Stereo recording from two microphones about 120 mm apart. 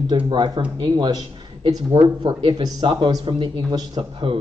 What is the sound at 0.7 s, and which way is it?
A man's voice, 40° right (ahead or behind).